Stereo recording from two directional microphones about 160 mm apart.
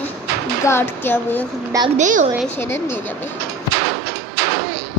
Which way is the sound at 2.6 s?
15° left (ahead or behind).